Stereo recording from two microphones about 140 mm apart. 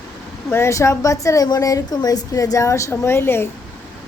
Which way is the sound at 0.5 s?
20° left (ahead or behind).